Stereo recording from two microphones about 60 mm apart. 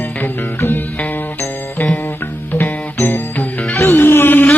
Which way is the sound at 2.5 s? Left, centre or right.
Left.